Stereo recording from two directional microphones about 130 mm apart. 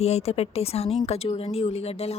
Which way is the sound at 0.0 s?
55° left (ahead or behind).